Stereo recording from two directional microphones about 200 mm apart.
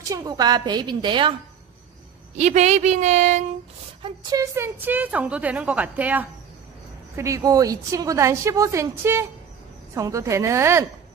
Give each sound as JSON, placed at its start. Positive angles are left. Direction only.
{"t": 0.1, "sound": "a woman's voice", "side_deg": -20}
{"t": 2.3, "sound": "a woman's voice", "side_deg": -35}
{"t": 4.0, "sound": "speech", "side_deg": -15}